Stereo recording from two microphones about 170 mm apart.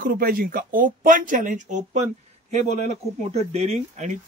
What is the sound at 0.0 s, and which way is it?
Speech, 55° right (ahead or behind).